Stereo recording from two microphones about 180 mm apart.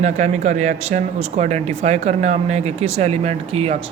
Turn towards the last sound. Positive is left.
turn(degrees=-35)  # may be behind; listen again after turning